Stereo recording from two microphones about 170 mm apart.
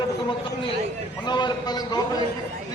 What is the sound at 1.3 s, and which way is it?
Speech, 25° left (ahead or behind).